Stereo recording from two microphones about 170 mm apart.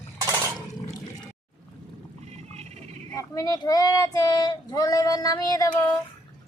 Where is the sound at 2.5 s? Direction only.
40° right (ahead or behind).